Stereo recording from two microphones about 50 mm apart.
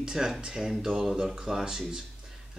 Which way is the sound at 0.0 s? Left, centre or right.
Centre.